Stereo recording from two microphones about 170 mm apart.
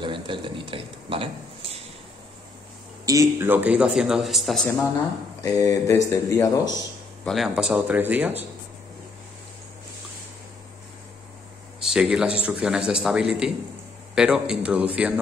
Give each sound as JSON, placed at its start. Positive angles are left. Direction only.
{"t": 0.0, "sound": "speech", "side_deg": -30}
{"t": 3.1, "sound": "a man's voice", "side_deg": -15}
{"t": 5.4, "sound": "speech", "side_deg": 20}
{"t": 7.2, "sound": "a man's voice", "side_deg": 0}
{"t": 11.8, "sound": "speech", "side_deg": -5}